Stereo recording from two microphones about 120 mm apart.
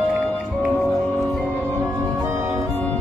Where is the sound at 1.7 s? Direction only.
25° right (ahead or behind).